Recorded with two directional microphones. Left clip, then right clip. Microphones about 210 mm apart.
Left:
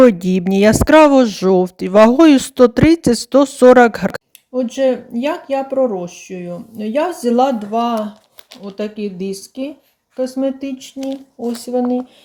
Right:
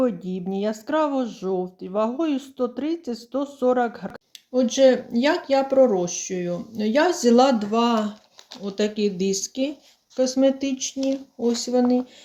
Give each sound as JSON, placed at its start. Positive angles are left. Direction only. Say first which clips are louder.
{"t": 0.0, "sound": "speech", "louder": "left 14 dB", "side_deg": 55}
{"t": 4.5, "sound": "speech", "louder": "left 1 dB", "side_deg": 0}